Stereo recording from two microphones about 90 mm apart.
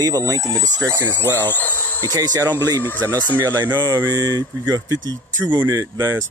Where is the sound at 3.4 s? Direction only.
50° right (ahead or behind).